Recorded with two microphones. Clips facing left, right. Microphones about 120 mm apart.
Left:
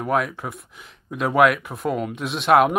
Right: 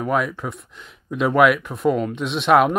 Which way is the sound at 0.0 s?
Centre (ahead or behind).